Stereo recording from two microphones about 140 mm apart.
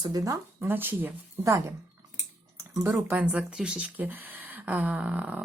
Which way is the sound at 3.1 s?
10° right (ahead or behind).